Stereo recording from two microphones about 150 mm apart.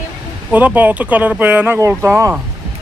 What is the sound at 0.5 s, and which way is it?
Speech, 10° right (ahead or behind).